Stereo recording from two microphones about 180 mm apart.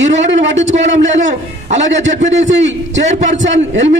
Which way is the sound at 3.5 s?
90° right.